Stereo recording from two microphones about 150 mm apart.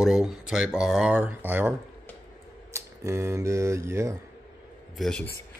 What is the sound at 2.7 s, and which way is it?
Speech, 20° right (ahead or behind).